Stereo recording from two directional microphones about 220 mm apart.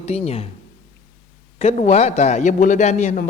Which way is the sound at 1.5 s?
30° left (ahead or behind).